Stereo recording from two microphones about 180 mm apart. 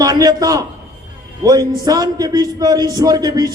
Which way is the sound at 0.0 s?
20° right (ahead or behind).